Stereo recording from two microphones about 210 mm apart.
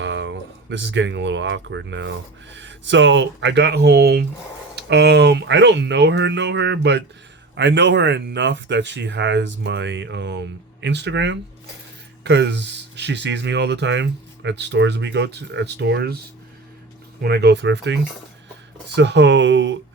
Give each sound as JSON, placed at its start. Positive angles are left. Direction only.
{"t": 0.0, "sound": "speech", "side_deg": -60}
{"t": 17.2, "sound": "speech", "side_deg": -50}